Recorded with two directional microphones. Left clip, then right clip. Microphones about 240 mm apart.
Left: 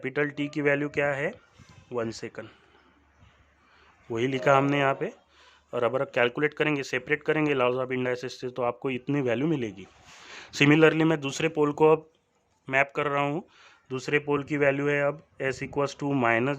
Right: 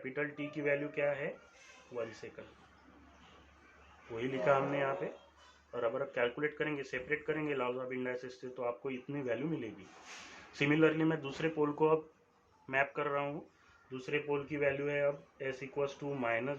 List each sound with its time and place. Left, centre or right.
0.0 s speech: left
4.2 s speech: left